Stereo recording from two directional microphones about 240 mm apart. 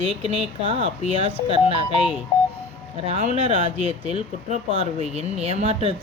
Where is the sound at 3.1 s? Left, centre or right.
Right.